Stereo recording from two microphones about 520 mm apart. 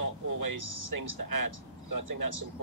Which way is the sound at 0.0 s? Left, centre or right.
Right.